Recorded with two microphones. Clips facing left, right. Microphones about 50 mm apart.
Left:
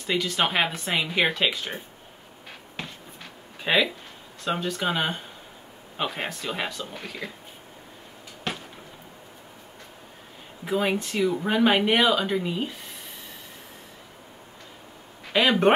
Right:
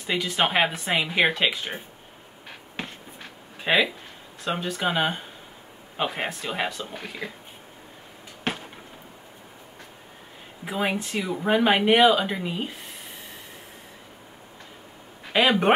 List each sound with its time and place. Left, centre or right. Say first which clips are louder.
0.0 s speech: even; centre
3.6 s speech: right 1 dB; centre
8.5 s a sound: right 3 dB; right
10.6 s speech: left 2 dB; centre
15.3 s speech: left 1 dB; centre